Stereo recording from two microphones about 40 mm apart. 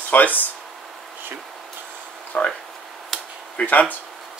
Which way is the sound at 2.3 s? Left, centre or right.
Left.